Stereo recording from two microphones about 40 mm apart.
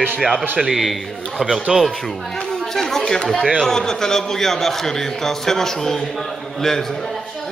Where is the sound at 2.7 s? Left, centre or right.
Centre.